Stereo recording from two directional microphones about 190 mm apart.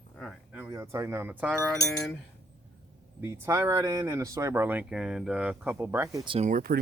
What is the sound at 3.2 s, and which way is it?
Speech, 15° right (ahead or behind).